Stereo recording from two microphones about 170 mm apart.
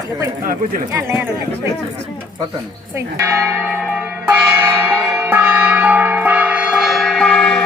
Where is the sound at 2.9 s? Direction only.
15° right (ahead or behind); by 7.6 s 5° left (ahead or behind).